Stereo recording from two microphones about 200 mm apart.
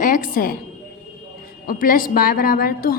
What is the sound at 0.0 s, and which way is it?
Speech, 40° left (ahead or behind).